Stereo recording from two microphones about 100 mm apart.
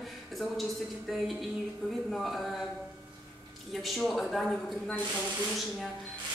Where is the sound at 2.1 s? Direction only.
Centre (ahead or behind).